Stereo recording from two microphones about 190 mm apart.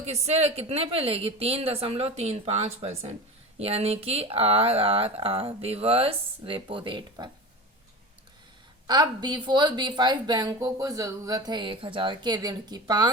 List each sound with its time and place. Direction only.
0.0 s speech: 35° right (ahead or behind)
8.9 s speech: 20° right (ahead or behind)